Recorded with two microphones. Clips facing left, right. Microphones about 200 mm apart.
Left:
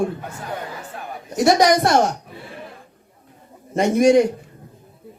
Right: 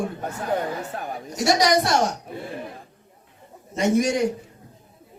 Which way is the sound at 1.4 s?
55° left (ahead or behind).